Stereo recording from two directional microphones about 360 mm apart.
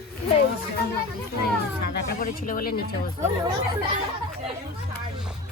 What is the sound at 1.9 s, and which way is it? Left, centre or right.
Speech, left.